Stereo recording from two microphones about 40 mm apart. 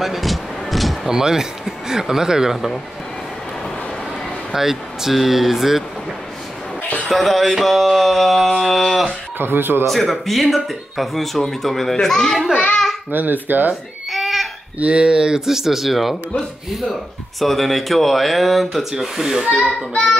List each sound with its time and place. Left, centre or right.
0.0 s a sound: centre
1.1 s speech: centre
4.5 s speech: centre
7.1 s speech: centre
9.4 s speech: right
9.8 s speech: centre
13.1 s speech: right
14.1 s a sound: centre
14.8 s speech: right
15.4 s speech: centre
17.4 s speech: centre
19.6 s child singing: centre